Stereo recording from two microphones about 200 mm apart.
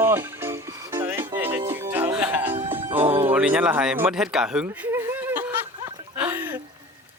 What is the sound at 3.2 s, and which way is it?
Speech, 10° right (ahead or behind).